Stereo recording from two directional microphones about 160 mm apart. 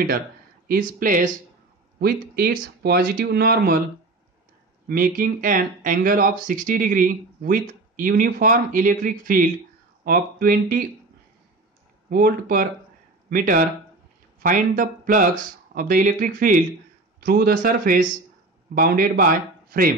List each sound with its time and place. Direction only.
0.7 s speech: 60° right (ahead or behind)
2.0 s speech: 70° right (ahead or behind)
4.8 s speech: 60° right (ahead or behind)
12.1 s speech: 65° right (ahead or behind)